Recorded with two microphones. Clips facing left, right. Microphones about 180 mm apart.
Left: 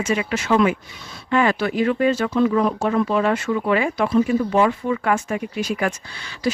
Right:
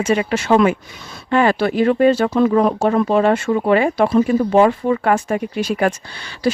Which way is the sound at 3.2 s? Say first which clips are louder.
Right 5 dB; 35° right (ahead or behind).